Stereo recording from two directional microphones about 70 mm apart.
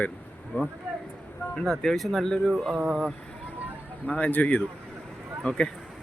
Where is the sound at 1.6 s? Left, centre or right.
Centre.